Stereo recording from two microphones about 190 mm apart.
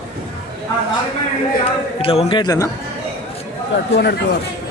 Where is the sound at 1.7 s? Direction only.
30° left (ahead or behind).